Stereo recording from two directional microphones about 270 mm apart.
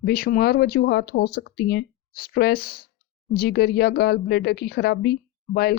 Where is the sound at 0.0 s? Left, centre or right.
Left.